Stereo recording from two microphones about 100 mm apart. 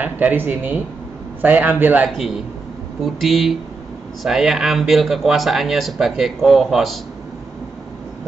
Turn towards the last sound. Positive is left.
turn(degrees=0)  # may be behind; listen again after turning